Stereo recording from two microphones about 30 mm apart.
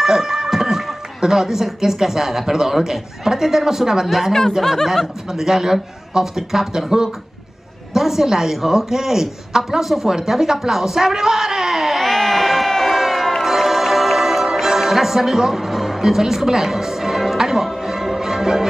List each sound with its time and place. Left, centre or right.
0.0 s a sound: centre
1.2 s a man's voice: centre
4.3 s speech: centre
5.3 s a man's voice: centre
7.9 s a man's voice: centre
12.0 s crowd: centre
13.4 s music: centre
16.0 s a woman's voice: centre
17.4 s music: centre